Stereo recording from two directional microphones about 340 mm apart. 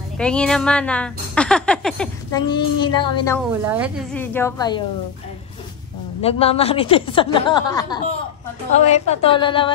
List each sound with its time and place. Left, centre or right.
0.2 s speech: centre
2.5 s a woman's voice: centre
3.6 s speech: centre
6.2 s a woman's voice: centre